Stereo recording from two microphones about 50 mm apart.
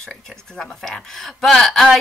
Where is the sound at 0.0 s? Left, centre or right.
Centre.